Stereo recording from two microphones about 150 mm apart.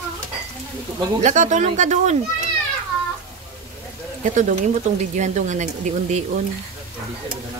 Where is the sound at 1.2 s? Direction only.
55° right (ahead or behind).